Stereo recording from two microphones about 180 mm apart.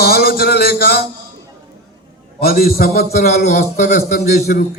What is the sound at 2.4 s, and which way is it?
Speech, 55° left (ahead or behind).